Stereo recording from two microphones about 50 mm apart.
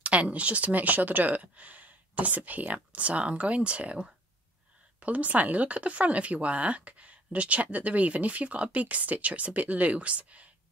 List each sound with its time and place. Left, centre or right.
0.0 s speech: right